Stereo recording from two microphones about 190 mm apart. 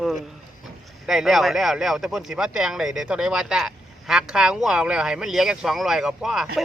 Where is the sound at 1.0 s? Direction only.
Centre (ahead or behind).